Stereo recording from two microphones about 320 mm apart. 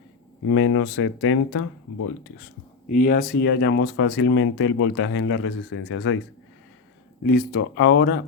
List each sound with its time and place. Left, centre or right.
0.4 s speech: left
2.9 s speech: left
7.2 s speech: left